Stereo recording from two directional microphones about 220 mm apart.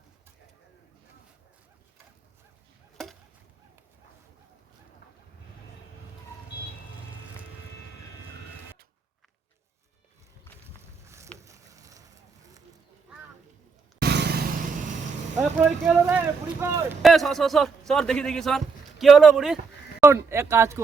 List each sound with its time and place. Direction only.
11.0 s a sound: 10° right (ahead or behind)
14.0 s vehicle: 50° right (ahead or behind)
15.4 s speech: 10° right (ahead or behind)
17.0 s a man's voice: centre (ahead or behind)